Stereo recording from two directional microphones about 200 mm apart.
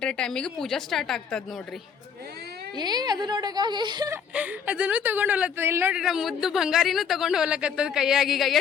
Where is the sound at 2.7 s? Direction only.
20° right (ahead or behind).